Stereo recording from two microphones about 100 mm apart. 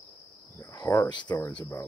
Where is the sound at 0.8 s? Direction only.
30° left (ahead or behind).